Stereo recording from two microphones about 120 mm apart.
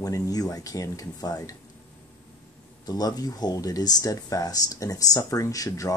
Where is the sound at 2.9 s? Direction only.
30° left (ahead or behind).